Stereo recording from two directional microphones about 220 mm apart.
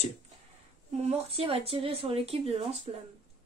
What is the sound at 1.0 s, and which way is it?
Speech, 25° right (ahead or behind).